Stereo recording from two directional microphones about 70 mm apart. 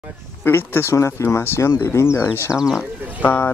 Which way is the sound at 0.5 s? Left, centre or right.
Left.